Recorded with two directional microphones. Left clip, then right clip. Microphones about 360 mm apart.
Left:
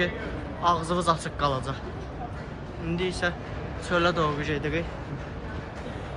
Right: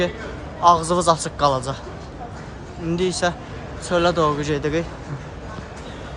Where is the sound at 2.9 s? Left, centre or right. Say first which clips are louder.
Right 7 dB; centre.